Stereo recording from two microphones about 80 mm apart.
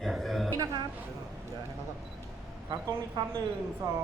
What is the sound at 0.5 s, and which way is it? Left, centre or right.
Speech, right.